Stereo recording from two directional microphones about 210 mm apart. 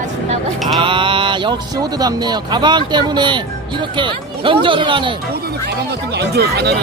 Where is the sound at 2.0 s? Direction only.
20° right (ahead or behind).